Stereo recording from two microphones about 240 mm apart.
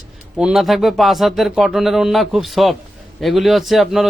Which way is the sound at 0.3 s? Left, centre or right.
Centre.